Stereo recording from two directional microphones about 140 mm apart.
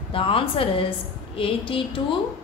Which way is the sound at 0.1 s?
40° left (ahead or behind).